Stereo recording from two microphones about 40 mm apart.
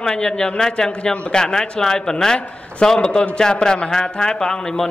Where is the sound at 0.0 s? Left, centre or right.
Centre.